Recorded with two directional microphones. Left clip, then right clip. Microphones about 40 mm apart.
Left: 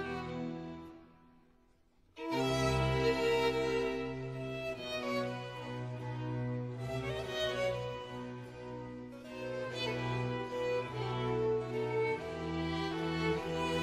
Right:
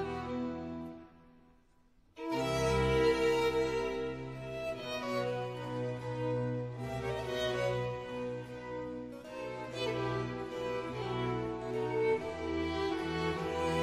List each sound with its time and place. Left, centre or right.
0.0 s music: left
2.2 s music: left
6.9 s music: left
9.4 s music: left